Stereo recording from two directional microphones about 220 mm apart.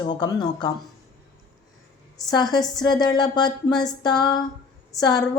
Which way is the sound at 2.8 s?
20° left (ahead or behind).